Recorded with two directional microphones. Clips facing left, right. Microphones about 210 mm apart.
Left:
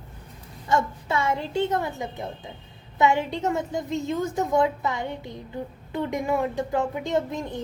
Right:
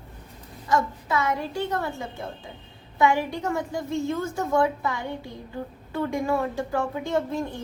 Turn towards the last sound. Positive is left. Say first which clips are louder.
# even
turn(degrees=20)  # may be behind; listen again after turning